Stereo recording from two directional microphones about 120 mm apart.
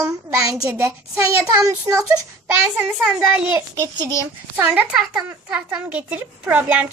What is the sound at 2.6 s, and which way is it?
Speech, 5° right (ahead or behind).